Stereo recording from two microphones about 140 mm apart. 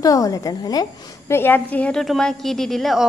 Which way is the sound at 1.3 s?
15° left (ahead or behind).